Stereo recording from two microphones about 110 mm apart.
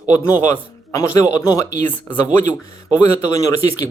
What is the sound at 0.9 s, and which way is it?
Speech, 30° left (ahead or behind).